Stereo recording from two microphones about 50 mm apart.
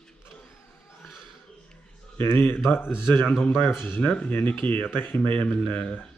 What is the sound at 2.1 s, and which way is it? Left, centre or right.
Speech, left.